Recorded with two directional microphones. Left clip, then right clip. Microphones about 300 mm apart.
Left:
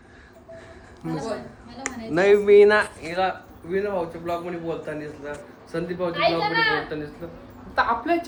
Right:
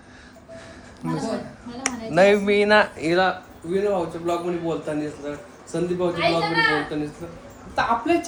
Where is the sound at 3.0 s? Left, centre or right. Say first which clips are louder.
Right 4 dB; right.